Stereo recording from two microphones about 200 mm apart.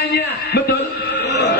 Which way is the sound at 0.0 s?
55° left (ahead or behind).